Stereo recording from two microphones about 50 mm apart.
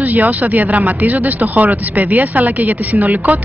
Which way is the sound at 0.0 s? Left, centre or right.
Right.